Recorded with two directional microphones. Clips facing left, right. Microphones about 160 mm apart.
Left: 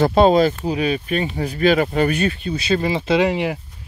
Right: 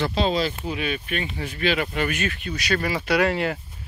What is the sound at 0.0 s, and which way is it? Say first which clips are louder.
Speech: left 9 dB; 50° left (ahead or behind).